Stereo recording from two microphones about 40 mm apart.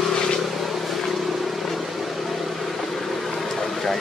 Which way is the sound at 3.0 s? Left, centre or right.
Centre.